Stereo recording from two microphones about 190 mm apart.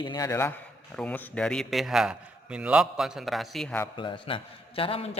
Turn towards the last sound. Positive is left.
turn(degrees=30)  # may be behind; listen again after turning